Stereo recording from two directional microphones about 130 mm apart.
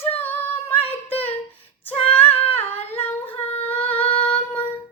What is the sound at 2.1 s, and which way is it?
Female singing, 15° left (ahead or behind).